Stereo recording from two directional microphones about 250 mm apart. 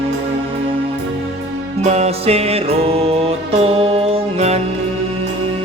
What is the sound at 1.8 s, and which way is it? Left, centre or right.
Music, right.